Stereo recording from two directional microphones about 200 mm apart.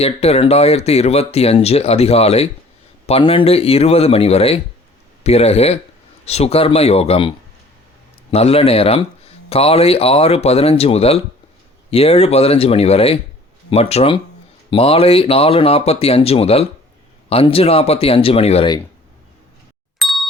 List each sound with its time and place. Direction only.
0.0 s speech: 30° left (ahead or behind)
20.0 s ding: centre (ahead or behind)